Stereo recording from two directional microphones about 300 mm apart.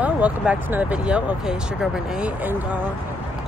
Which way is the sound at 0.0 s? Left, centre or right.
Centre.